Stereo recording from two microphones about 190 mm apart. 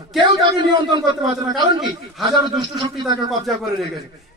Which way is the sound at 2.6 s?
25° right (ahead or behind).